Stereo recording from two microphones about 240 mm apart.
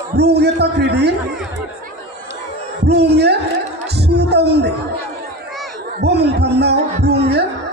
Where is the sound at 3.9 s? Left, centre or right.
Right.